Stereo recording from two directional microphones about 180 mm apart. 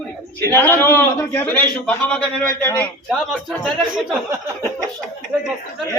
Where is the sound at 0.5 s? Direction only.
15° left (ahead or behind).